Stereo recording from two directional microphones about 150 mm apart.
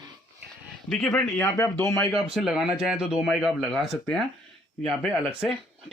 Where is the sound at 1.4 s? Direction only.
20° left (ahead or behind).